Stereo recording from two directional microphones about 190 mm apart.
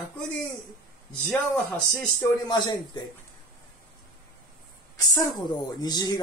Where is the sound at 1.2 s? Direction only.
5° left (ahead or behind).